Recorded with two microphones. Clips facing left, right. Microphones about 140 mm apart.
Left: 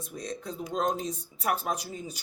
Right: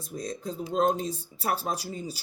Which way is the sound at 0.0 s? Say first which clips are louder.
Right 2 dB; 40° right (ahead or behind).